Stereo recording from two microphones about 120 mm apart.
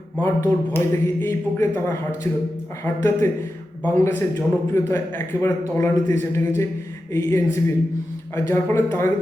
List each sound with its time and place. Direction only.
0.2 s a man's voice: 20° left (ahead or behind)